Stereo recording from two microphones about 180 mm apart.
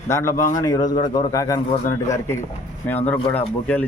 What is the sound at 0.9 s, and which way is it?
Speech, 45° left (ahead or behind).